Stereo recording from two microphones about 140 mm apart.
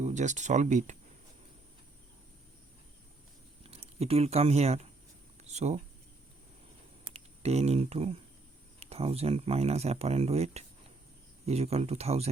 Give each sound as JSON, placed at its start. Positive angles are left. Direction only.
{"t": 0.0, "sound": "speech", "side_deg": -55}
{"t": 3.6, "sound": "speech", "side_deg": -45}
{"t": 7.1, "sound": "speech", "side_deg": -50}